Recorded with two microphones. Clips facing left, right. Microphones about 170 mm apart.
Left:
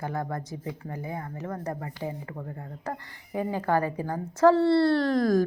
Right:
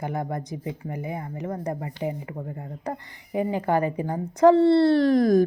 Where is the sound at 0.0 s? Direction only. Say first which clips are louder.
Right 2 dB; 20° right (ahead or behind).